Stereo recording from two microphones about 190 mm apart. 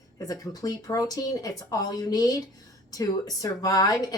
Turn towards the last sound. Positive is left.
turn(degrees=20)  # may be behind; listen again after turning